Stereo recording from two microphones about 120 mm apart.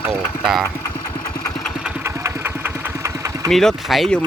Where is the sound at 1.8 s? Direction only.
15° right (ahead or behind).